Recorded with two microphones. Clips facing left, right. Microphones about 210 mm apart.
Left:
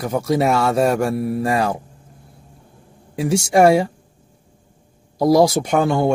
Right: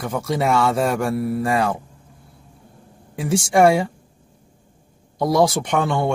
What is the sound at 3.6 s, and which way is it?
Speech, 25° left (ahead or behind).